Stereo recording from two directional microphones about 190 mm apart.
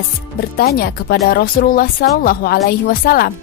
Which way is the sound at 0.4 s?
50° left (ahead or behind).